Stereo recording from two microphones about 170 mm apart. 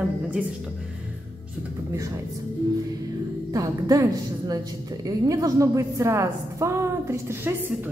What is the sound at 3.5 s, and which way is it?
A woman's voice, 20° right (ahead or behind).